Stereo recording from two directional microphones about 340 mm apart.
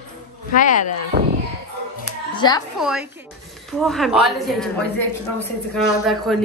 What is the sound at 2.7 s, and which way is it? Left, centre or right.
A woman's voice, centre.